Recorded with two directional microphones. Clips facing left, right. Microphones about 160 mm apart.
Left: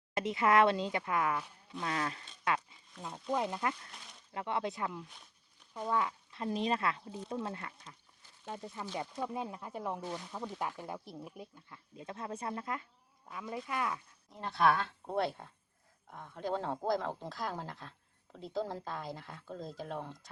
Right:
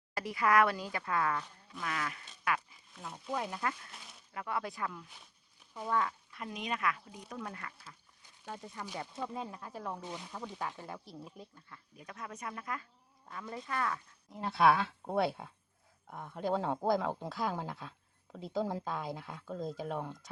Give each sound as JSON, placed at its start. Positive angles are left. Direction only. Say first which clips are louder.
{"t": 0.1, "sound": "speech", "louder": "left 1 dB", "side_deg": 20}
{"t": 1.8, "sound": "speech", "louder": "left 2 dB", "side_deg": 30}
{"t": 6.3, "sound": "speech", "louder": "left 6 dB", "side_deg": 30}
{"t": 13.2, "sound": "speech", "louder": "left 2 dB", "side_deg": 10}
{"t": 14.3, "sound": "speech", "louder": "right 2 dB", "side_deg": -5}